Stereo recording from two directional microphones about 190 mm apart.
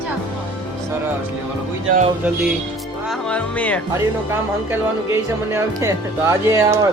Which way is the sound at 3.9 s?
15° right (ahead or behind).